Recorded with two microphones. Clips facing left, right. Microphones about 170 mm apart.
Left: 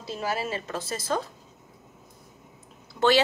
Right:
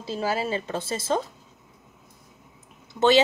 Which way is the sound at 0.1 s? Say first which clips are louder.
Right 3 dB; 30° right (ahead or behind).